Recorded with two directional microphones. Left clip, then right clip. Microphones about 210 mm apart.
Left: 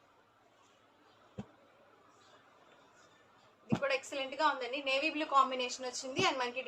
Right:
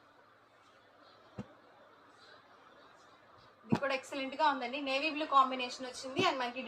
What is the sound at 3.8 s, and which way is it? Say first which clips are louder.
A woman's voice: left 4 dB; 40° left (ahead or behind).